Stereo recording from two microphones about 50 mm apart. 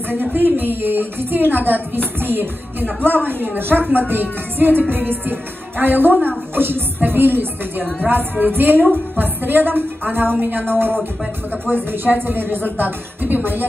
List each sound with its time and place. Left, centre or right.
0.1 s a woman's voice: right